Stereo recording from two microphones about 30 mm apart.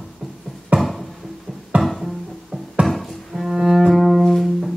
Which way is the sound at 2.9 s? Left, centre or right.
Centre.